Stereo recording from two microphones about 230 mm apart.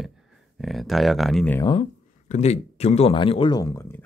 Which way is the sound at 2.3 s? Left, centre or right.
Left.